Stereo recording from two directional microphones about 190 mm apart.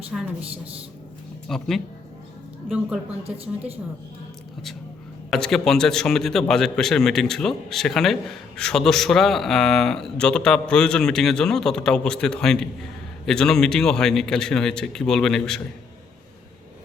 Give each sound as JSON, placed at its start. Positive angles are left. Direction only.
{"t": 1.5, "sound": "a man's voice", "side_deg": 0}
{"t": 3.2, "sound": "a woman's voice", "side_deg": -30}
{"t": 5.3, "sound": "a man's voice", "side_deg": 0}